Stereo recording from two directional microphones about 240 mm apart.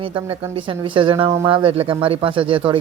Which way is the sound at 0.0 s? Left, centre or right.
Right.